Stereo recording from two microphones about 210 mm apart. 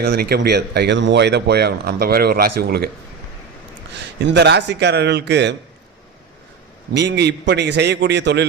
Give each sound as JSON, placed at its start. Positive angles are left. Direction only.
{"t": 0.0, "sound": "speech", "side_deg": -50}
{"t": 4.2, "sound": "speech", "side_deg": -55}
{"t": 6.9, "sound": "speech", "side_deg": -55}